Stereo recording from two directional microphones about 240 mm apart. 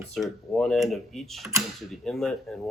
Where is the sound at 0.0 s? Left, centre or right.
Centre.